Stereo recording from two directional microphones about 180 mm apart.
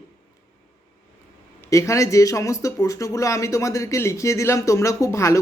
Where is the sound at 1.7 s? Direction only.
15° left (ahead or behind).